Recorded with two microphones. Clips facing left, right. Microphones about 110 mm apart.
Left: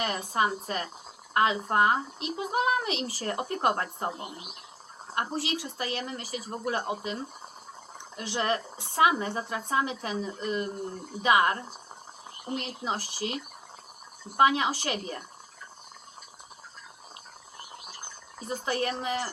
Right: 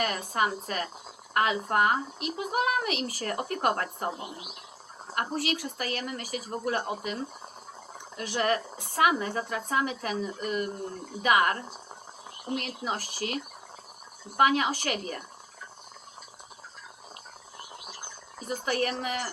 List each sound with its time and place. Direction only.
0.0 s speech: 25° left (ahead or behind)
5.1 s speech: 25° left (ahead or behind)
12.5 s speech: 30° left (ahead or behind)
18.4 s speech: 30° left (ahead or behind)